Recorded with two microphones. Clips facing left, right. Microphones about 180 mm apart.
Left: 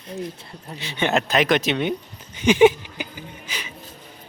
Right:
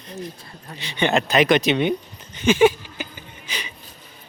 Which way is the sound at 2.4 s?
15° left (ahead or behind).